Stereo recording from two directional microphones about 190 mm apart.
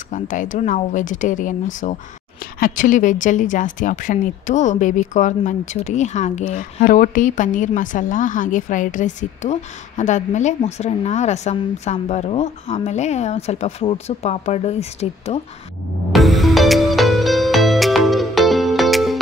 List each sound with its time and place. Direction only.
0.1 s a woman's voice: 45° left (ahead or behind)
16.1 s music: centre (ahead or behind)